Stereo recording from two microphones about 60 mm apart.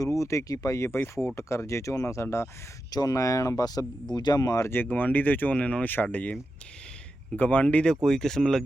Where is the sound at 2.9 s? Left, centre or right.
Left.